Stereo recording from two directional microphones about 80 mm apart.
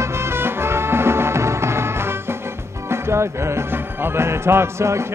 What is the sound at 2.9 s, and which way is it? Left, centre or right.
Music, right.